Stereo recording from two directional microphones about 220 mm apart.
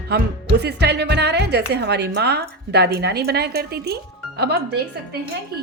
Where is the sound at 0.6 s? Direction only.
50° right (ahead or behind).